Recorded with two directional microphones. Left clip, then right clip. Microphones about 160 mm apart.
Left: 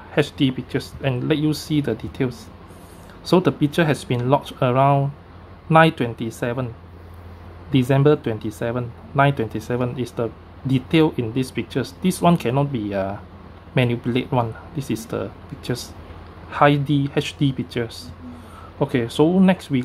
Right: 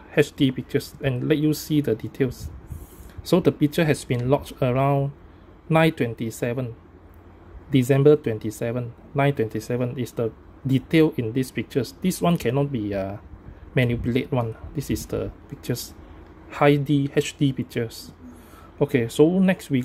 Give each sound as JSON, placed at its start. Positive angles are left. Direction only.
{"t": 0.1, "sound": "speech", "side_deg": -35}
{"t": 7.7, "sound": "speech", "side_deg": -30}